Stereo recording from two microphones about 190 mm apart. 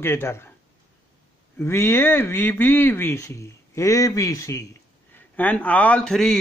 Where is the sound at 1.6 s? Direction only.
10° left (ahead or behind).